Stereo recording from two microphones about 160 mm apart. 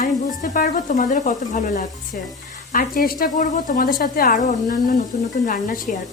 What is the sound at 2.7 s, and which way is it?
Speech, 60° left (ahead or behind).